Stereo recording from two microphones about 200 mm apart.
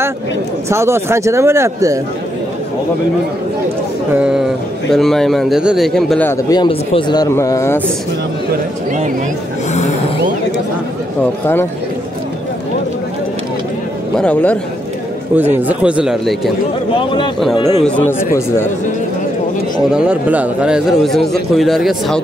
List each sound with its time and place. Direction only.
0.7 s speech: 15° right (ahead or behind)
4.1 s a man's voice: 5° right (ahead or behind); by 7.8 s 15° left (ahead or behind)
14.1 s a man's voice: 5° left (ahead or behind)
15.3 s a man's voice: 10° right (ahead or behind)
17.6 s speech: 30° left (ahead or behind)
17.8 s a man's voice: 5° left (ahead or behind)
19.9 s a man's voice: 5° right (ahead or behind)